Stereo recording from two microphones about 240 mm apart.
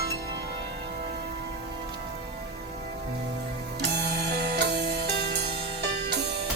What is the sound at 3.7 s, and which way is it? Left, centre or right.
Music, right.